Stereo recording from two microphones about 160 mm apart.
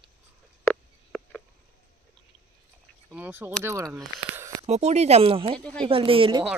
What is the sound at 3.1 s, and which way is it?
Speech, 10° right (ahead or behind).